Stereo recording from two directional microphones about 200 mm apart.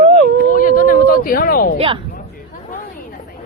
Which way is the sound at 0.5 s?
45° left (ahead or behind).